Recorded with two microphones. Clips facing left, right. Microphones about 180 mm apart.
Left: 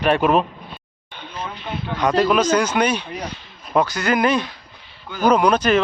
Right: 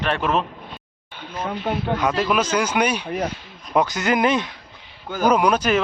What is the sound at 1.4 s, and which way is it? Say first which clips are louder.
Speech: right 5 dB; 50° right (ahead or behind).